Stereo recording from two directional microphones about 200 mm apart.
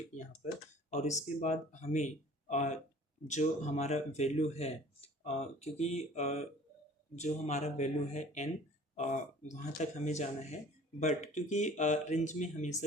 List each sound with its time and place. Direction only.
0.9 s speech: 35° left (ahead or behind)